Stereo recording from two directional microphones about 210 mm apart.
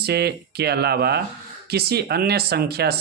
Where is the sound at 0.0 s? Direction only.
50° right (ahead or behind).